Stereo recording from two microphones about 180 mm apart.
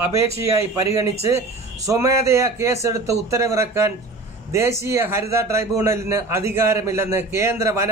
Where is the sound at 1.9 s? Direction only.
15° right (ahead or behind).